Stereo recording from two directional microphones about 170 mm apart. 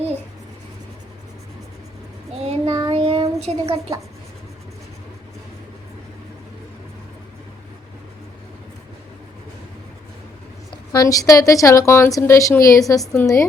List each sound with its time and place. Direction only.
2.4 s child singing: 35° right (ahead or behind)
10.7 s a woman's voice: 20° left (ahead or behind)